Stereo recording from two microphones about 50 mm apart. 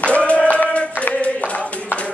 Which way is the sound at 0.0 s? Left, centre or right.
Left.